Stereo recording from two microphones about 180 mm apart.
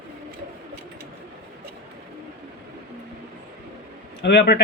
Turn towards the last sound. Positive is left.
turn(degrees=65)  # may be behind; listen again after turning